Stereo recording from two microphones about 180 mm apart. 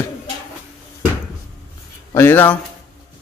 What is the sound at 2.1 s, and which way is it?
Speech, 10° left (ahead or behind).